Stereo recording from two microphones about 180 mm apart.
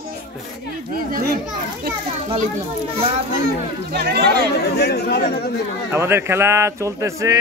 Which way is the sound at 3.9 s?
65° right (ahead or behind).